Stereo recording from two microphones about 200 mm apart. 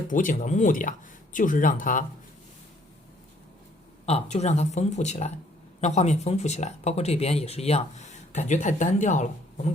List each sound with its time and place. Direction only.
0.1 s speech: 40° left (ahead or behind)
4.0 s speech: 35° left (ahead or behind)